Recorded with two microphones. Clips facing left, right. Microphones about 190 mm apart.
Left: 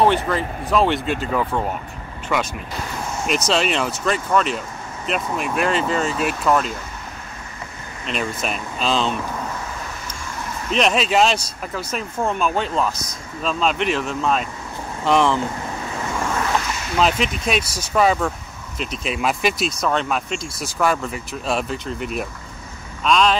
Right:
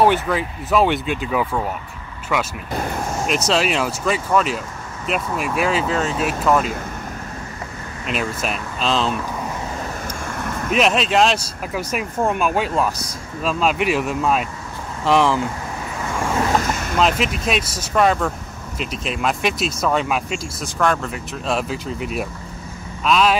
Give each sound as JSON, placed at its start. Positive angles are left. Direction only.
{"t": 0.0, "sound": "speech", "side_deg": -5}
{"t": 8.1, "sound": "speech", "side_deg": -5}
{"t": 10.2, "sound": "vehicle", "side_deg": -55}
{"t": 10.7, "sound": "speech", "side_deg": 0}
{"t": 16.5, "sound": "a sound", "side_deg": -50}
{"t": 17.0, "sound": "speech", "side_deg": 0}